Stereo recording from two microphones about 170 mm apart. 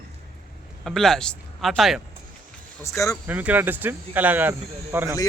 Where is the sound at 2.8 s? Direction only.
20° left (ahead or behind).